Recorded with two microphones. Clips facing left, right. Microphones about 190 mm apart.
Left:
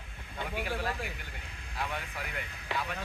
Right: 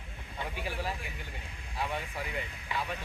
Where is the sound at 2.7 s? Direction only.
80° left.